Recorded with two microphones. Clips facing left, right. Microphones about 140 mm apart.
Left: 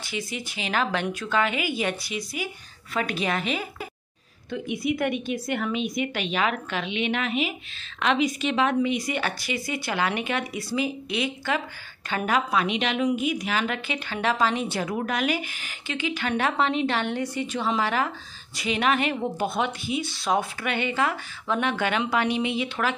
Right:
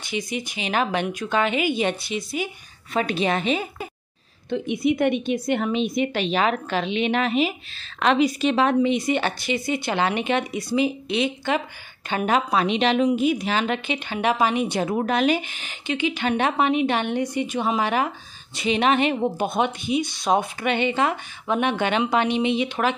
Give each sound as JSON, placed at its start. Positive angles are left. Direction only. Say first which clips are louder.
{"t": 0.0, "sound": "a woman's voice", "louder": "right 4 dB", "side_deg": -20}